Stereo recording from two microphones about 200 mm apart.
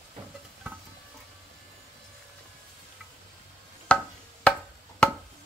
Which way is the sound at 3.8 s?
5° left (ahead or behind).